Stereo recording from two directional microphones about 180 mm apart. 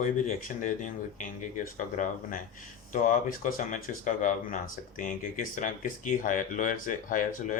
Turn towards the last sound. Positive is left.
turn(degrees=50)  # may be behind; listen again after turning